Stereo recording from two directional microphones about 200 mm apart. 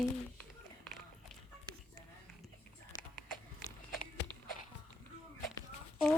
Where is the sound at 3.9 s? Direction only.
45° left (ahead or behind).